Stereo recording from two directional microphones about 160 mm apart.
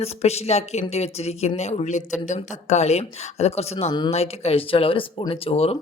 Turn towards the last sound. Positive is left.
turn(degrees=40)  # may be behind; listen again after turning